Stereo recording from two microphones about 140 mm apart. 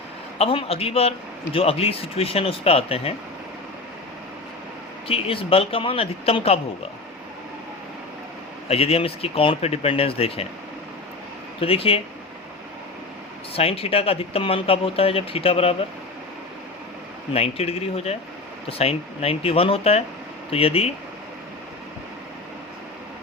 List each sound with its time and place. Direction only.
0.3 s speech: 45° left (ahead or behind)
5.0 s speech: 45° left (ahead or behind)
8.6 s speech: 45° left (ahead or behind)
11.6 s speech: 45° left (ahead or behind)
13.5 s speech: 45° left (ahead or behind)
17.3 s speech: 45° left (ahead or behind)